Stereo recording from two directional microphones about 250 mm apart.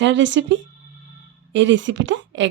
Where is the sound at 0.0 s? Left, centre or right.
Right.